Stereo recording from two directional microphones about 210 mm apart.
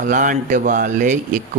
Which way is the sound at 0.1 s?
40° right (ahead or behind).